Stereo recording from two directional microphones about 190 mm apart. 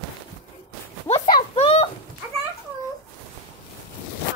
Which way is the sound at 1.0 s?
35° left (ahead or behind).